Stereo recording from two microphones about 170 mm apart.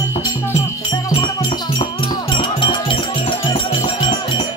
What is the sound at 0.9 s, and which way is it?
Music, 25° left (ahead or behind).